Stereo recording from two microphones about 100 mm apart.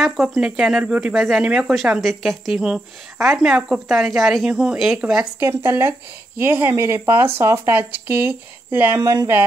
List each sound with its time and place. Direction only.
0.0 s speech: 5° right (ahead or behind)
5.4 s speech: 25° right (ahead or behind)
8.9 s speech: 35° right (ahead or behind)